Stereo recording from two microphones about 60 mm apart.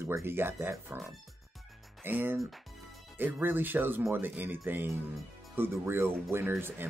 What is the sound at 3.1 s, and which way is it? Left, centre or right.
Speech, right.